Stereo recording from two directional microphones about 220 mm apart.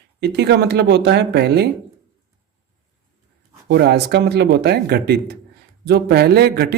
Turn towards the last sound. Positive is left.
turn(degrees=-45)  # may be behind; listen again after turning